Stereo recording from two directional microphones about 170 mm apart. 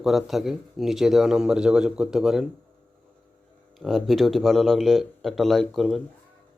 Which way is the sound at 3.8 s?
Centre (ahead or behind).